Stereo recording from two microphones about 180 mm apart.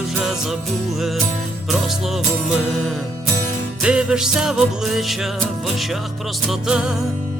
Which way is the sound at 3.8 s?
5° right (ahead or behind).